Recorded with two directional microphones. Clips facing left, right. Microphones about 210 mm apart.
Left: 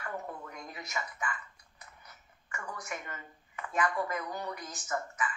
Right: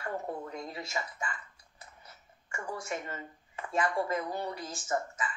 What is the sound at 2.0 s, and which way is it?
Speech, 30° right (ahead or behind).